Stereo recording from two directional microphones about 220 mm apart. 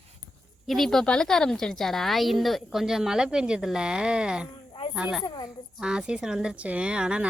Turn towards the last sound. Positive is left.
turn(degrees=-5)  # may be behind; listen again after turning